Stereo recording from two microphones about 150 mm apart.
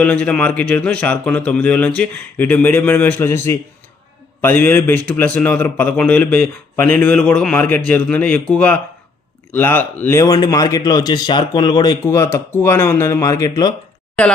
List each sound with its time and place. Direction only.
0.0 s a man's voice: 10° left (ahead or behind); by 13.7 s 25° left (ahead or behind)
14.2 s a man's voice: 10° left (ahead or behind)